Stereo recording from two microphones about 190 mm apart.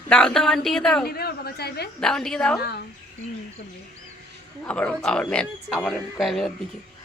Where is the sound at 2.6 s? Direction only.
60° left (ahead or behind).